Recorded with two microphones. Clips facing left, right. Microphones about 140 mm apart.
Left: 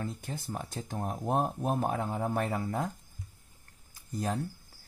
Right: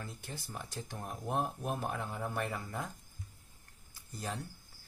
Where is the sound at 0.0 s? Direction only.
50° left (ahead or behind).